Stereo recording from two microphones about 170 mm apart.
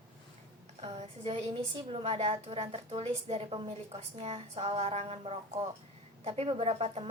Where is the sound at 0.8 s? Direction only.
40° right (ahead or behind).